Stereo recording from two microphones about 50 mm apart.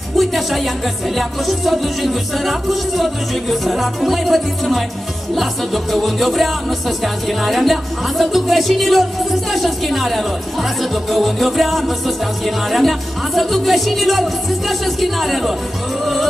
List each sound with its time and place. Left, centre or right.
0.2 s music: centre